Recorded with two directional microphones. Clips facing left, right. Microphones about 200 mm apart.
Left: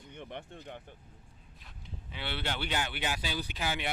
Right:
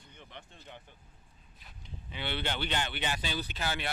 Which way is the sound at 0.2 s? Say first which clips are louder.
Left 8 dB; 55° left (ahead or behind).